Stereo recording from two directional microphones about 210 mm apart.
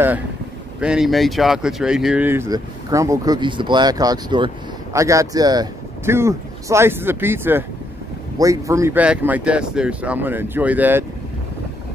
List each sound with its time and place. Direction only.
0.7 s speech: 5° right (ahead or behind)